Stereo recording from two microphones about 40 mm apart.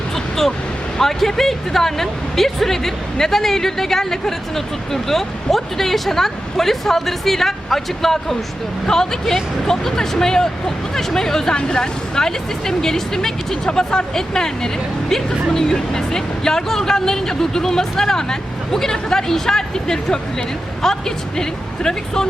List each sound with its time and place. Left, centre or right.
0.9 s speech: centre